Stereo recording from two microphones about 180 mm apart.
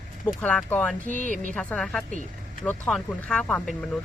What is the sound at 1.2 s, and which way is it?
Speech, 45° right (ahead or behind).